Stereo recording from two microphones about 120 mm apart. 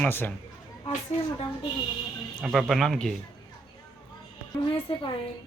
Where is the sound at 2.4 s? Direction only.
Centre (ahead or behind).